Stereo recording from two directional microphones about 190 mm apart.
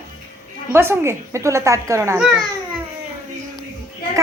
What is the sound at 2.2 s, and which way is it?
Speech, centre (ahead or behind).